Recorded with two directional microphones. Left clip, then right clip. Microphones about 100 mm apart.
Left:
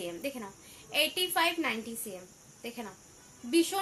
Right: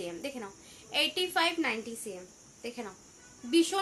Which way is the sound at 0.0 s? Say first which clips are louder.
Left 1 dB; 25° right (ahead or behind).